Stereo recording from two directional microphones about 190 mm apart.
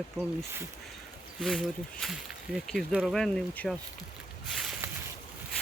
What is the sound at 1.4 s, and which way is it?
Speech, centre (ahead or behind).